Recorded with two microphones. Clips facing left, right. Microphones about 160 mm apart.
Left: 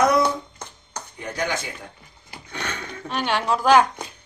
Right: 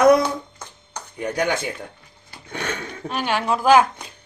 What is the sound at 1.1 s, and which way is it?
Speech, 55° right (ahead or behind).